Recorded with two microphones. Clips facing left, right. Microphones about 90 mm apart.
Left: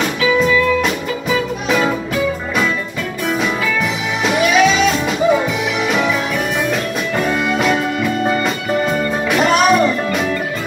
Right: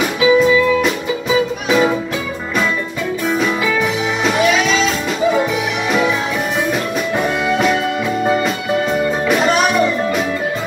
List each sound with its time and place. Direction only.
0.2 s music: 15° right (ahead or behind)
1.7 s music: 5° right (ahead or behind)